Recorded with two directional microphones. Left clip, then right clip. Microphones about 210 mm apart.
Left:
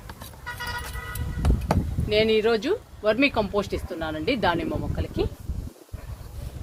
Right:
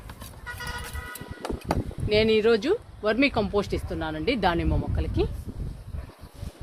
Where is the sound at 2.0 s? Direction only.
50° right (ahead or behind).